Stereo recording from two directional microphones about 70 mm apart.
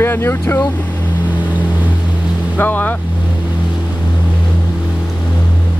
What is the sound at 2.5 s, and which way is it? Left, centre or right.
Speech, left.